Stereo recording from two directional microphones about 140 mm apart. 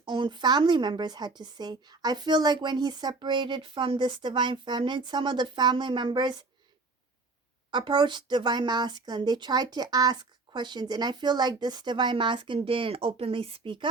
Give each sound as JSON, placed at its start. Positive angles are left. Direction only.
{"t": 0.0, "sound": "a woman's voice", "side_deg": -35}
{"t": 7.7, "sound": "a woman's voice", "side_deg": -35}